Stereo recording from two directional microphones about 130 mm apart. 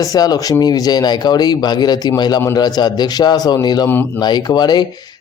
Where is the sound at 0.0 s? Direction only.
30° left (ahead or behind).